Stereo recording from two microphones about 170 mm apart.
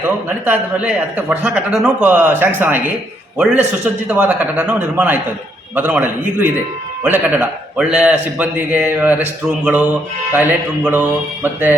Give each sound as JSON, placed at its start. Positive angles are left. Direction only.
{"t": 0.4, "sound": "a man's voice", "side_deg": -10}